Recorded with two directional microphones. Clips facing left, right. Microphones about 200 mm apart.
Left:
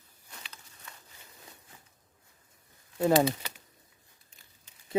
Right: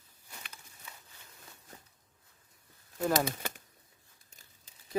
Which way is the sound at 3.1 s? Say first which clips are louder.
Left 6 dB; 50° right (ahead or behind).